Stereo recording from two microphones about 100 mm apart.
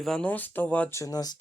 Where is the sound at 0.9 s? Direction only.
35° left (ahead or behind).